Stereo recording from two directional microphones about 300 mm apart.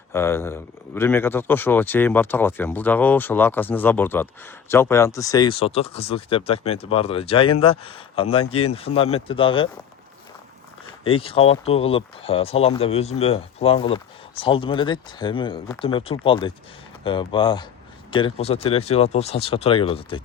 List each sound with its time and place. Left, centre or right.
0.1 s speech: centre
11.0 s speech: centre